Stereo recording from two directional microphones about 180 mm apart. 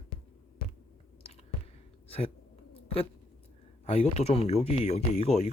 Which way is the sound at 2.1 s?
35° left (ahead or behind).